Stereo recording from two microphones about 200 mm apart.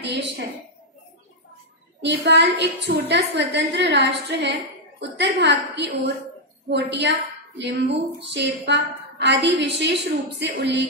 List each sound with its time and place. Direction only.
0.0 s a woman's voice: 60° right (ahead or behind)
2.0 s a woman's voice: 60° right (ahead or behind)